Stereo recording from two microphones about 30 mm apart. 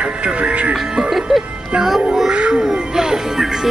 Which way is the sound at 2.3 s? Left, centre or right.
Right.